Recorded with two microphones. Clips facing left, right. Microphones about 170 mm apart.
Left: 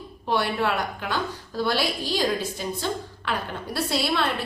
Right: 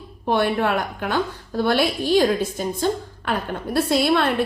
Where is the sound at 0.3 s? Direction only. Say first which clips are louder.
Right 4 dB; 50° right (ahead or behind).